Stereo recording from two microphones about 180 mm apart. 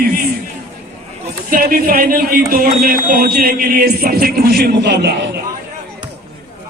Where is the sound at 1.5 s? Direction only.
55° right (ahead or behind).